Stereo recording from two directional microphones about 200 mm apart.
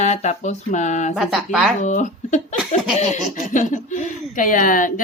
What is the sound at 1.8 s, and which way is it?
Speech, 35° left (ahead or behind).